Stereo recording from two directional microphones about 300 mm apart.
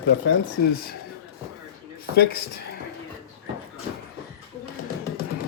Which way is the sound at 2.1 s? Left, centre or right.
Left.